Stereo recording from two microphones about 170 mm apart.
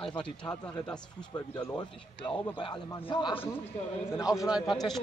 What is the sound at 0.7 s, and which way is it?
Speech, 25° left (ahead or behind).